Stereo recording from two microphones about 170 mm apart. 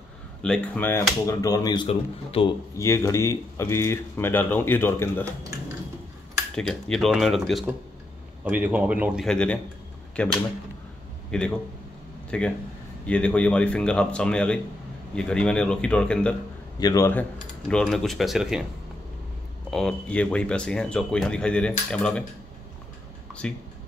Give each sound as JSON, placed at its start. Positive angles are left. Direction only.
{"t": 0.4, "sound": "speech", "side_deg": 5}
{"t": 1.2, "sound": "speech", "side_deg": 20}
{"t": 2.8, "sound": "speech", "side_deg": 15}
{"t": 6.5, "sound": "a man's voice", "side_deg": 5}
{"t": 9.2, "sound": "a man's voice", "side_deg": 5}
{"t": 16.8, "sound": "speech", "side_deg": 20}
{"t": 19.7, "sound": "speech", "side_deg": 5}
{"t": 23.4, "sound": "speech", "side_deg": 5}